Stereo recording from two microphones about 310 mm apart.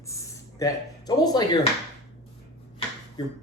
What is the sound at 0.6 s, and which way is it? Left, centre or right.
Speech, centre.